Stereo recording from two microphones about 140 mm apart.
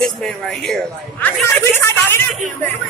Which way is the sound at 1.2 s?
15° left (ahead or behind).